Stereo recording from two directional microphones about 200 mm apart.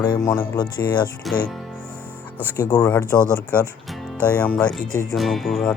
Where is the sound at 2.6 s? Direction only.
15° left (ahead or behind).